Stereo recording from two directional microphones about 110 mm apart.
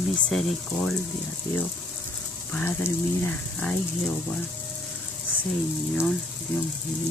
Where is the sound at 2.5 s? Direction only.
15° left (ahead or behind).